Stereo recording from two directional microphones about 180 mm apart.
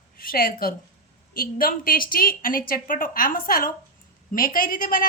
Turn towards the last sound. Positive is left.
turn(degrees=50)  # may be behind; listen again after turning